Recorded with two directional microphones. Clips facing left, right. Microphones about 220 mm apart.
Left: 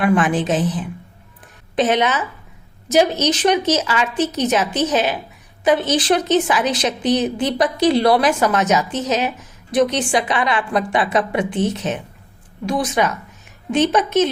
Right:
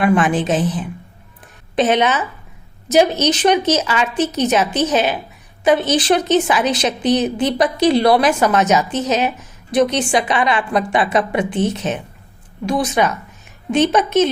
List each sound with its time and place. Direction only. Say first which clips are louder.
0.0 s a woman's voice: right 1 dB; 25° right (ahead or behind)